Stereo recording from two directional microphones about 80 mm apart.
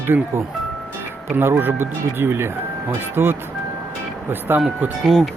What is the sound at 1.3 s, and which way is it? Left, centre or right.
Speech, right.